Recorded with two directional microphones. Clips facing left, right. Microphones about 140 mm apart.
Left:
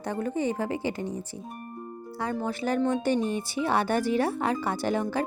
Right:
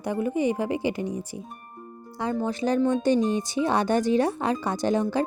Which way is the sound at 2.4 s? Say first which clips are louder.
Right 3 dB; 20° right (ahead or behind).